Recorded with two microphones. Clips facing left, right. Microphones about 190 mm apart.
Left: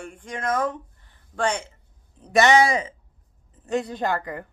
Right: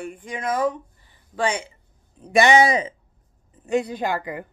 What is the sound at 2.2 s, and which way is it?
A woman's voice, 15° right (ahead or behind).